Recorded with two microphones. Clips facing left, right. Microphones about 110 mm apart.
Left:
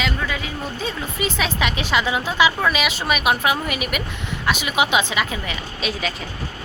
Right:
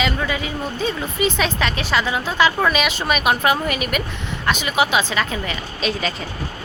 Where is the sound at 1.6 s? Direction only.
15° left (ahead or behind).